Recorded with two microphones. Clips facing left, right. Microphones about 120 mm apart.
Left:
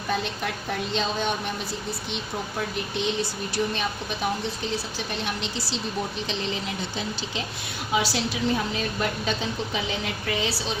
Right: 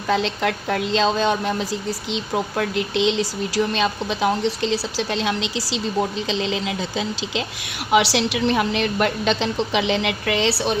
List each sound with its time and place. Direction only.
0.1 s a woman's voice: 90° right; by 10.8 s 65° right (ahead or behind)